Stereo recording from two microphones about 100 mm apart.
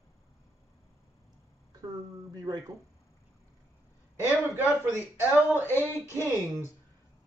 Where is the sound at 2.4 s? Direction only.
35° right (ahead or behind).